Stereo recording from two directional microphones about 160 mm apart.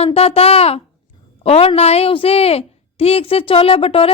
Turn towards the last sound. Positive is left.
turn(degrees=35)  # may be behind; listen again after turning